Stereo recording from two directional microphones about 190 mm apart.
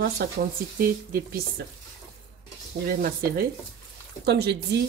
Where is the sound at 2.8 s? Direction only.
50° right (ahead or behind).